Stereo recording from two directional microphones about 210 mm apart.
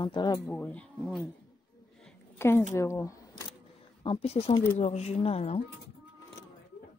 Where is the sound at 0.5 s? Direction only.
5° left (ahead or behind).